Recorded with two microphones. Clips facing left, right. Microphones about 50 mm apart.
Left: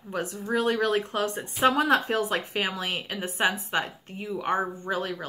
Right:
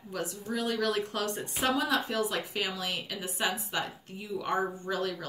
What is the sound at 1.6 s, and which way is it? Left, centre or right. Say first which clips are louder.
A woman's voice: left 7 dB; left.